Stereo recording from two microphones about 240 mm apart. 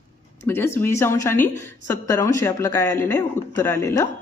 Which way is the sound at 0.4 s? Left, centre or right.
Centre.